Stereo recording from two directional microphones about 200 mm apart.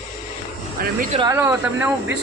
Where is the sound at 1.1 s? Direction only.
15° right (ahead or behind).